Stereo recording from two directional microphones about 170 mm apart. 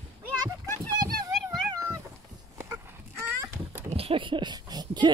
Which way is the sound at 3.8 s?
35° right (ahead or behind).